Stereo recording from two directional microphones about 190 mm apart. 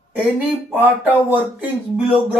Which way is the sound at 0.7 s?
10° right (ahead or behind).